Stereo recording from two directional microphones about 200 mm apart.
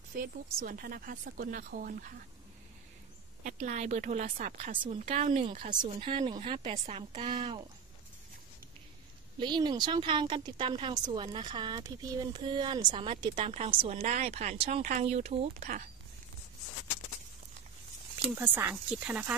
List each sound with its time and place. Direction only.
0.2 s speech: 45° right (ahead or behind)
3.4 s speech: 35° right (ahead or behind)
9.4 s speech: 20° right (ahead or behind)
18.3 s speech: 10° right (ahead or behind)